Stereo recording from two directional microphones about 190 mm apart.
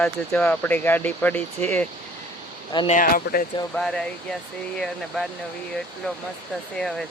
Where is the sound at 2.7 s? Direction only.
25° left (ahead or behind).